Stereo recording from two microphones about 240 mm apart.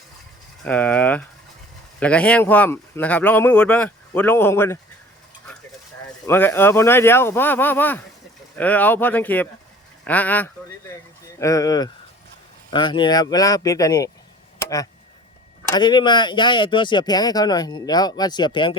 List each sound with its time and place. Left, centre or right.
0.6 s speech: centre
6.2 s speech: centre
14.6 s a sound: centre
15.7 s speech: centre